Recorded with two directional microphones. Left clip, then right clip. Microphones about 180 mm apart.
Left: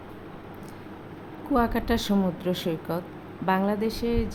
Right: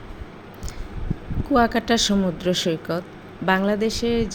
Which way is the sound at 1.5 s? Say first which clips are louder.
Right 6 dB; 10° right (ahead or behind).